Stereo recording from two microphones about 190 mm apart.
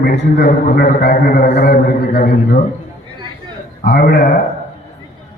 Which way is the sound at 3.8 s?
55° left (ahead or behind).